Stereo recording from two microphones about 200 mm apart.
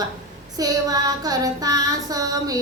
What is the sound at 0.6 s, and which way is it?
Child singing, 20° right (ahead or behind).